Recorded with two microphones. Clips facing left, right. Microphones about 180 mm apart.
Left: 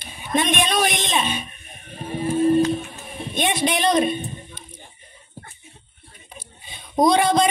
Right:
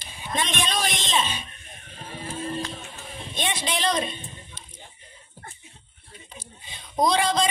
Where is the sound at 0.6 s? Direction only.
55° left (ahead or behind).